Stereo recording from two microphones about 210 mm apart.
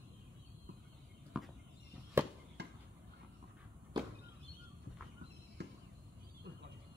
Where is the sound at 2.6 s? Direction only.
50° right (ahead or behind).